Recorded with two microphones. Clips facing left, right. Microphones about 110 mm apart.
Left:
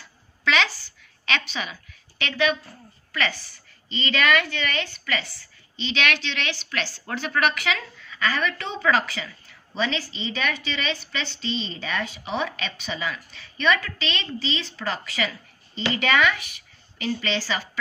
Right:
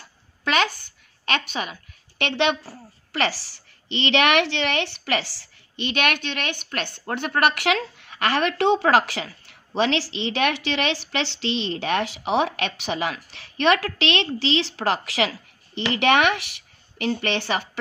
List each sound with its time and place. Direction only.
0.0 s a sound: 50° right (ahead or behind); by 2.7 s 70° right (ahead or behind)
3.1 s a woman's voice: 80° right
5.8 s a woman's voice: 55° right (ahead or behind)